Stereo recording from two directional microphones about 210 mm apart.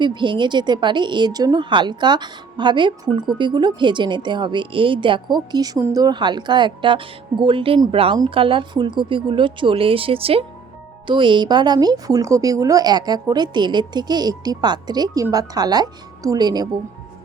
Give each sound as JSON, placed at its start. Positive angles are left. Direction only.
{"t": 0.0, "sound": "a woman's voice", "side_deg": -20}